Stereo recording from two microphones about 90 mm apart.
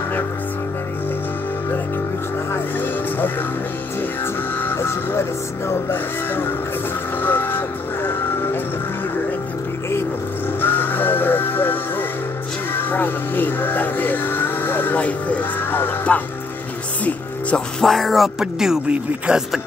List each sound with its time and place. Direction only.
2.5 s speech: 25° left (ahead or behind)
4.6 s vehicle: 25° left (ahead or behind)
5.7 s speech: 25° left (ahead or behind)
7.2 s vehicle: 25° left (ahead or behind)
10.6 s music: 20° left (ahead or behind)
17.8 s speech: centre (ahead or behind)